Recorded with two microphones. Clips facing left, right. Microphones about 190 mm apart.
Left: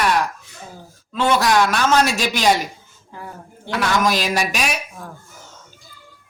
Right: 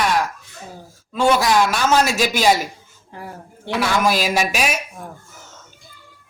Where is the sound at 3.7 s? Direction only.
10° right (ahead or behind).